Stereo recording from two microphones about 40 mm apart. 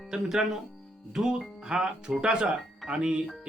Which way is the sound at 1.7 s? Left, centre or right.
Right.